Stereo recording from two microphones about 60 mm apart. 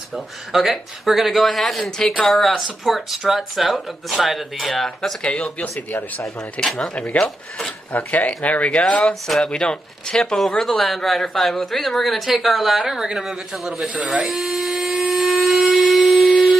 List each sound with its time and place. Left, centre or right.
0.1 s speech: centre
5.3 s speech: left; by 13.8 s centre
14.3 s a sound: centre